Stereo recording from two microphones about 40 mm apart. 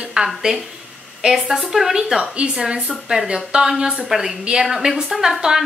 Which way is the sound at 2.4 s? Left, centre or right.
Right.